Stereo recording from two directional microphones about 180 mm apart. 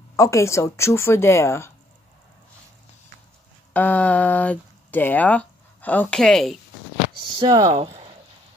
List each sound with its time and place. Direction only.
0.1 s speech: 15° left (ahead or behind)
3.7 s speech: 10° left (ahead or behind)
7.3 s speech: 25° right (ahead or behind)
7.7 s speech: 35° right (ahead or behind)